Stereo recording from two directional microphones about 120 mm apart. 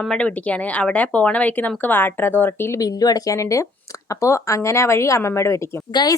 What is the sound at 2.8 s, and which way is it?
Speech, 30° left (ahead or behind).